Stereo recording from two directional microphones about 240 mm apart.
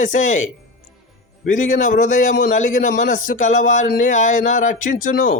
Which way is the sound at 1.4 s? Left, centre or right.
Left.